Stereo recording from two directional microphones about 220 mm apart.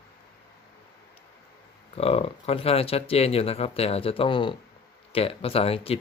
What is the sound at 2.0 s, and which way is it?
Speech, 25° left (ahead or behind).